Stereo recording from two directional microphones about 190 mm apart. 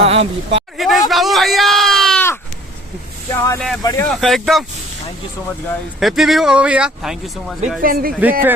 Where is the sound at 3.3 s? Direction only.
15° left (ahead or behind).